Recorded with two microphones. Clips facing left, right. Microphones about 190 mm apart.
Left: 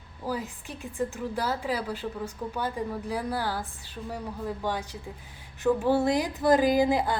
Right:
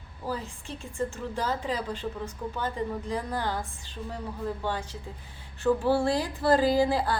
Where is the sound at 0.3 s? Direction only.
10° left (ahead or behind).